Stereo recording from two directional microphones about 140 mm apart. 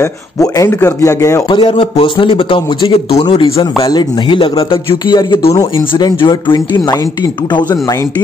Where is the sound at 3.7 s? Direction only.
30° left (ahead or behind).